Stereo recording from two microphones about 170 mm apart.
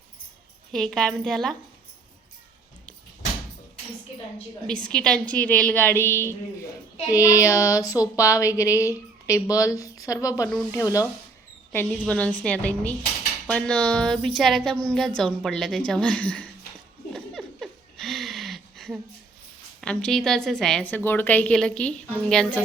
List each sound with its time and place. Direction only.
0.7 s a woman's voice: centre (ahead or behind)
4.6 s a woman's voice: 5° left (ahead or behind)
7.1 s a sound: 20° left (ahead or behind)
10.7 s a woman's voice: 20° left (ahead or behind)
17.2 s a sound: centre (ahead or behind)
19.8 s a woman's voice: 5° left (ahead or behind)